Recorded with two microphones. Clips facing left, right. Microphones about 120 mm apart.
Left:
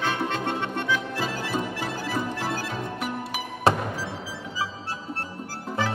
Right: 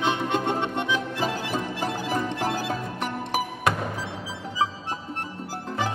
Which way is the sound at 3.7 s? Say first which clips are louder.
Left 5 dB; 30° left (ahead or behind).